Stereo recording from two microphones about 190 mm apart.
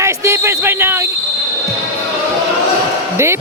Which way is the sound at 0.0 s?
15° right (ahead or behind).